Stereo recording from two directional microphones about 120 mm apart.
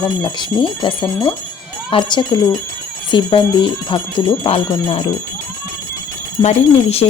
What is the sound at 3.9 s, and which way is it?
Speech, 45° left (ahead or behind).